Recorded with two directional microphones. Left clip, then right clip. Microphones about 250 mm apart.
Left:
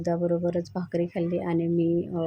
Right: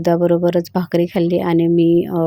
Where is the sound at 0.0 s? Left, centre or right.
Right.